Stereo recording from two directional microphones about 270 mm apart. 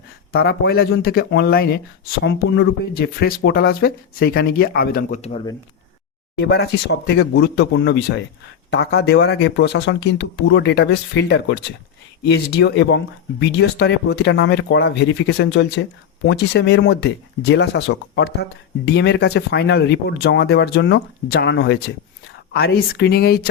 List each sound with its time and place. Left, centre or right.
0.3 s speech: left
6.3 s speech: left